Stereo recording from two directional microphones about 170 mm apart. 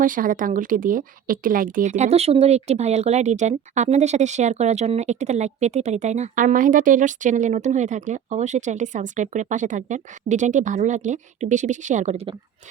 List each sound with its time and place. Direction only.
0.0 s speech: 55° right (ahead or behind); by 12.4 s 35° right (ahead or behind)